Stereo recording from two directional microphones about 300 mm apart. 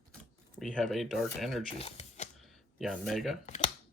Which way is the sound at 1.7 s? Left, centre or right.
Centre.